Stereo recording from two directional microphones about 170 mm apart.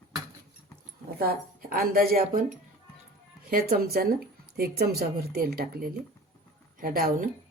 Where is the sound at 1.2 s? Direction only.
60° right (ahead or behind).